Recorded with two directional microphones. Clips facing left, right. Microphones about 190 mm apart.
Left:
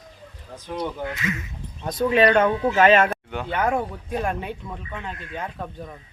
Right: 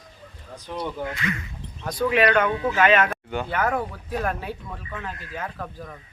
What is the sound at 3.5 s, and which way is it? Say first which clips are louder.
Speech: left 3 dB; 20° left (ahead or behind).